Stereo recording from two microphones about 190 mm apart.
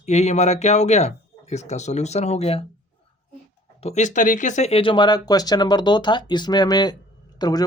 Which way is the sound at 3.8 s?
40° left (ahead or behind).